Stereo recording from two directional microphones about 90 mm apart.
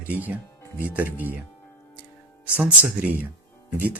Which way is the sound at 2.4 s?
15° right (ahead or behind).